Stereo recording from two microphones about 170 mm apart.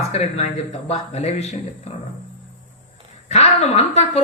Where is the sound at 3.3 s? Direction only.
40° left (ahead or behind).